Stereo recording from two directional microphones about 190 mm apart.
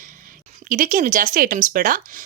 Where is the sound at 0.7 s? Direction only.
45° right (ahead or behind).